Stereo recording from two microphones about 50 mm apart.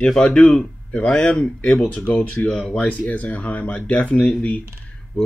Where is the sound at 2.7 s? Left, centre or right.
Left.